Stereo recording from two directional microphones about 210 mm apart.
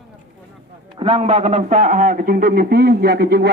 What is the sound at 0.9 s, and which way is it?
A man's voice, 25° right (ahead or behind).